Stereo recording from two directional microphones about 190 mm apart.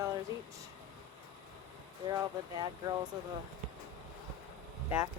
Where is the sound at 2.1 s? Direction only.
20° right (ahead or behind).